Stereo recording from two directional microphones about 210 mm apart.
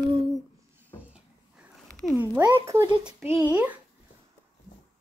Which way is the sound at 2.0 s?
10° right (ahead or behind).